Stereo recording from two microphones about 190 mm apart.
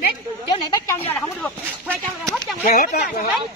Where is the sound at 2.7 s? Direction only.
55° left (ahead or behind).